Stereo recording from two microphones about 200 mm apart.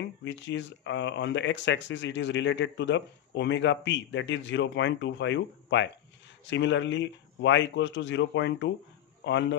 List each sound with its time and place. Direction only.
0.0 s speech: 65° left (ahead or behind)